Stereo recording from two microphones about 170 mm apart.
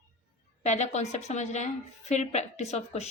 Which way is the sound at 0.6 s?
45° left (ahead or behind).